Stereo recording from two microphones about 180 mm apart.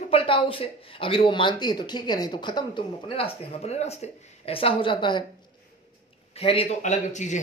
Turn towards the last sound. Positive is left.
turn(degrees=40)  # may be behind; listen again after turning